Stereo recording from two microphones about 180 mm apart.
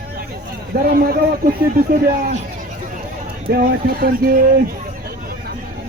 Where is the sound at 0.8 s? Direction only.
55° right (ahead or behind).